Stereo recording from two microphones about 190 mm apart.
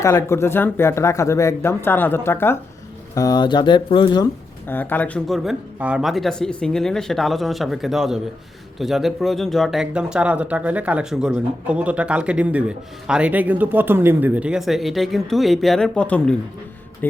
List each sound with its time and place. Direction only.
0.0 s speech: 15° left (ahead or behind)
4.6 s speech: 10° left (ahead or behind)